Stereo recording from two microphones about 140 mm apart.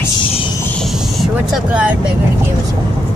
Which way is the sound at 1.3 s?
10° right (ahead or behind).